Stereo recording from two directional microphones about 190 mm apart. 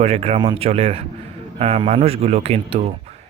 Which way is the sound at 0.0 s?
35° right (ahead or behind).